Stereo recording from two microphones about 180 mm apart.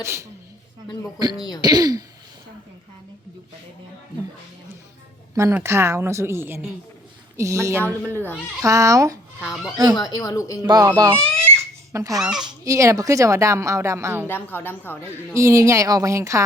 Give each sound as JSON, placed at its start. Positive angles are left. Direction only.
{"t": 0.0, "sound": "a woman's voice", "side_deg": -15}
{"t": 1.4, "sound": "speech", "side_deg": 20}
{"t": 1.6, "sound": "a child's voice", "side_deg": -20}
{"t": 5.3, "sound": "a woman's voice", "side_deg": -15}
{"t": 7.9, "sound": "a woman's voice", "side_deg": 10}
{"t": 8.6, "sound": "a woman's voice", "side_deg": -20}
{"t": 9.4, "sound": "speech", "side_deg": 0}
{"t": 9.9, "sound": "speech", "side_deg": 20}
{"t": 10.6, "sound": "a child's voice", "side_deg": -20}
{"t": 12.2, "sound": "speech", "side_deg": -5}
{"t": 12.6, "sound": "a woman's voice", "side_deg": -15}
{"t": 14.3, "sound": "a woman's voice", "side_deg": 10}
{"t": 15.4, "sound": "a woman's voice", "side_deg": -15}